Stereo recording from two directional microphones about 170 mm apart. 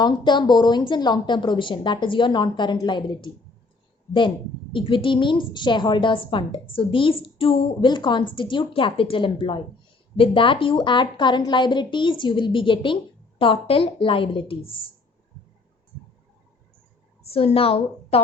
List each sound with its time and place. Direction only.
0.0 s a woman's voice: 25° left (ahead or behind)
4.7 s a woman's voice: 30° left (ahead or behind)
17.3 s a woman's voice: 35° left (ahead or behind)